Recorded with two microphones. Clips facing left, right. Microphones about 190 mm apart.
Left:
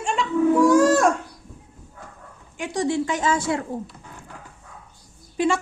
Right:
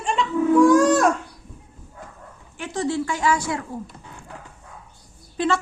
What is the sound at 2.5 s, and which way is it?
A woman's voice, 15° left (ahead or behind).